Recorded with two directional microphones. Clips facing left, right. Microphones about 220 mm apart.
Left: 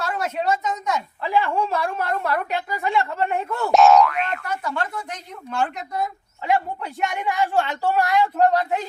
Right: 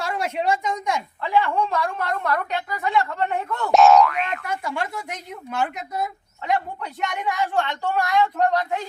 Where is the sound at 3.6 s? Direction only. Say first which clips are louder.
Even; centre (ahead or behind).